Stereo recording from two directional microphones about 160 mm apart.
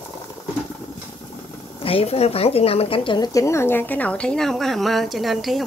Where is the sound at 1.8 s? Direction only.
35° left (ahead or behind).